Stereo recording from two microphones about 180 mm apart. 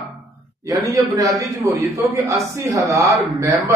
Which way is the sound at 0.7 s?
20° right (ahead or behind).